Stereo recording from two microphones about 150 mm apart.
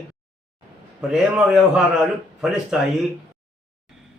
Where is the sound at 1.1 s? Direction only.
5° right (ahead or behind).